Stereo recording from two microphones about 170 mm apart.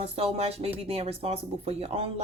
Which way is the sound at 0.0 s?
35° right (ahead or behind).